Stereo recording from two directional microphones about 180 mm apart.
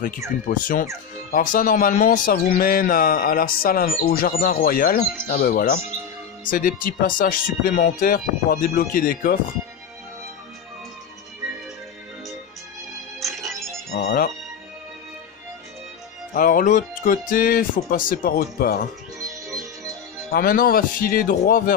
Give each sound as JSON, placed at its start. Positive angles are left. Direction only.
{"t": 0.5, "sound": "speech", "side_deg": 45}
{"t": 13.2, "sound": "music", "side_deg": 0}
{"t": 13.9, "sound": "music", "side_deg": 60}
{"t": 16.3, "sound": "speech", "side_deg": 50}
{"t": 20.2, "sound": "speech", "side_deg": 55}